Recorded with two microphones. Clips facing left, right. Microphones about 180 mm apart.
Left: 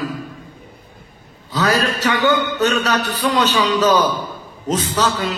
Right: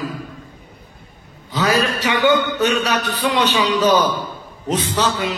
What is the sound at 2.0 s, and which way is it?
Music, 10° right (ahead or behind).